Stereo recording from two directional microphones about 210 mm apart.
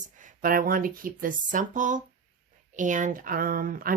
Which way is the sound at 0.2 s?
40° right (ahead or behind).